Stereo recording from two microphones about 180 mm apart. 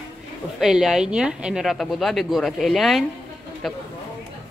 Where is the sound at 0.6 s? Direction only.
Centre (ahead or behind).